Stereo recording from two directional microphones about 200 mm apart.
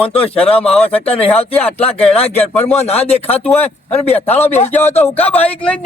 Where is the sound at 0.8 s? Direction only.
30° left (ahead or behind).